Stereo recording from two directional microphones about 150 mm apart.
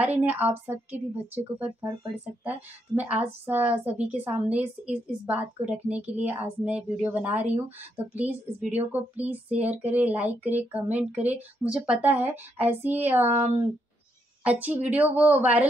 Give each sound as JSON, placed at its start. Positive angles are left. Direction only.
{"t": 0.0, "sound": "a woman's voice", "side_deg": -10}
{"t": 3.0, "sound": "a woman's voice", "side_deg": -10}
{"t": 14.4, "sound": "a woman's voice", "side_deg": -10}